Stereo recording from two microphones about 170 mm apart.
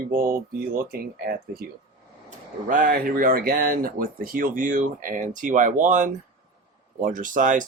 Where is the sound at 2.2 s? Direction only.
50° right (ahead or behind).